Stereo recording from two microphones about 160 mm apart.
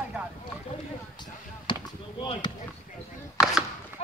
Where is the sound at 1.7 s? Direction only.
30° left (ahead or behind).